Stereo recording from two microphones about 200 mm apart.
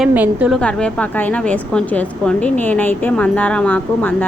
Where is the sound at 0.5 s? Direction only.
5° left (ahead or behind).